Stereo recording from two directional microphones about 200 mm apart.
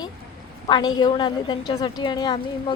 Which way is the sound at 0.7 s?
20° left (ahead or behind).